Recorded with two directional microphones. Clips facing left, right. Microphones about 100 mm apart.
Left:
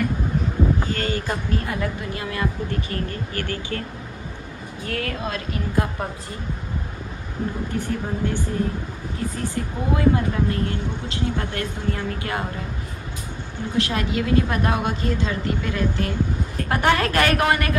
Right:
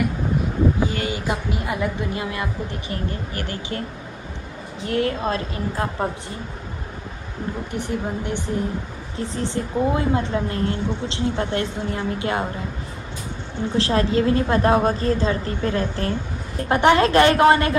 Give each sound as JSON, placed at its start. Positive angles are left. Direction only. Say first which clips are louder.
{"t": 0.7, "sound": "speech", "louder": "right 1 dB", "side_deg": -10}
{"t": 4.8, "sound": "speech", "louder": "right 6 dB", "side_deg": -25}
{"t": 7.7, "sound": "speech", "louder": "even", "side_deg": -20}
{"t": 13.7, "sound": "a woman's voice", "louder": "right 4 dB", "side_deg": -30}
{"t": 16.5, "sound": "speech", "louder": "right 5 dB", "side_deg": -25}